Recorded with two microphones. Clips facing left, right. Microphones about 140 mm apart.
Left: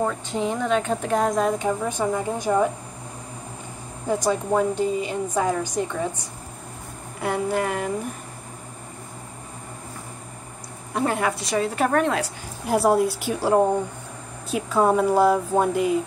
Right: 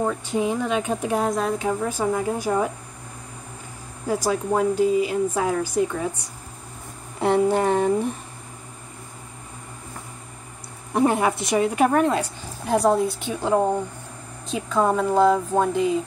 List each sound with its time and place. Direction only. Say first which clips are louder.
0.0 s speech: right 1 dB; 15° right (ahead or behind)
4.2 s speech: even; 5° right (ahead or behind)
7.2 s speech: right 5 dB; 30° right (ahead or behind)
11.0 s speech: right 4 dB; 20° right (ahead or behind)
12.6 s speech: even; 5° left (ahead or behind)